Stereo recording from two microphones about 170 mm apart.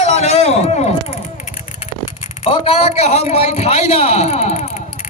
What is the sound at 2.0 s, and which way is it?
A man's voice, 35° left (ahead or behind).